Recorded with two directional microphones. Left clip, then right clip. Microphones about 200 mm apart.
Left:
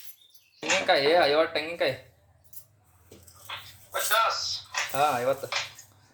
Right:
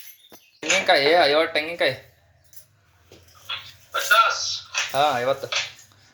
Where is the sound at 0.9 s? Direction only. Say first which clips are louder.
Right 4 dB; 25° right (ahead or behind).